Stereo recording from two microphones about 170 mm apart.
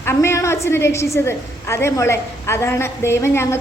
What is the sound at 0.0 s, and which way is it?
A woman's voice, 15° left (ahead or behind).